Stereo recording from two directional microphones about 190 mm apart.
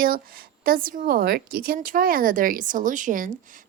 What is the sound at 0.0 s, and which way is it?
A woman's voice, 50° right (ahead or behind).